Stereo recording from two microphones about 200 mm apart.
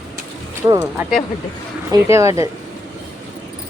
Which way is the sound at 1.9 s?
15° right (ahead or behind).